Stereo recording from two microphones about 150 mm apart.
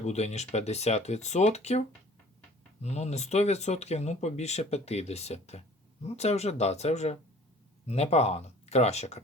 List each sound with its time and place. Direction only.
0.0 s speech: 50° left (ahead or behind)